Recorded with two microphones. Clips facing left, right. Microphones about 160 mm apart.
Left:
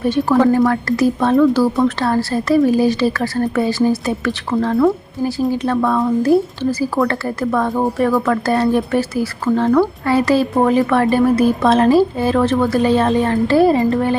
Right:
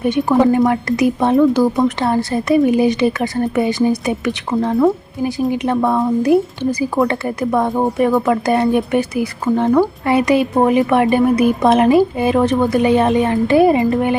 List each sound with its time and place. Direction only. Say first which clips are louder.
0.0 s a woman's voice: even; 15° right (ahead or behind)